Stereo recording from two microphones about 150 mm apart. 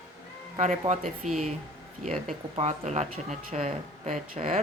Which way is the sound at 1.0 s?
Centre (ahead or behind).